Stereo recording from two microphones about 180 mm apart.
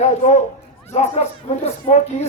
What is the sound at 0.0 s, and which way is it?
Speech, 40° left (ahead or behind).